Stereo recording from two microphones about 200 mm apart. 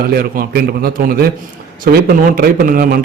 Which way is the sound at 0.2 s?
50° right (ahead or behind).